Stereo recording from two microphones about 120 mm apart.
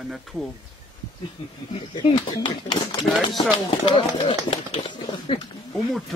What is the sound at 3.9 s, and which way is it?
Speech, 55° left (ahead or behind).